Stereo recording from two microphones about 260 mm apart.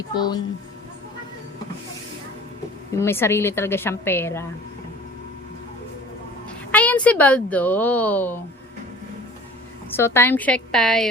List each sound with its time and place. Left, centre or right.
0.1 s a woman's voice: centre
2.9 s a woman's voice: centre
6.7 s speech: centre
9.9 s speech: centre